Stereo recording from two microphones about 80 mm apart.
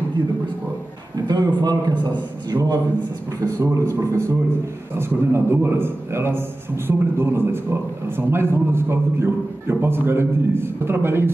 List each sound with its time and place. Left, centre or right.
1.2 s a man's voice: right
3.6 s a man's voice: right